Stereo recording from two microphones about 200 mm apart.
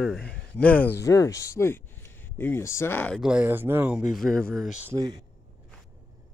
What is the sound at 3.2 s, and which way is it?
Speech, 5° right (ahead or behind).